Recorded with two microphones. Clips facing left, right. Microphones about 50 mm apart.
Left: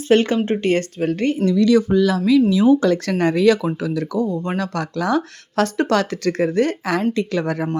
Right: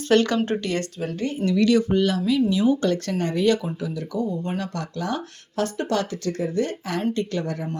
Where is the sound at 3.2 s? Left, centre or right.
Left.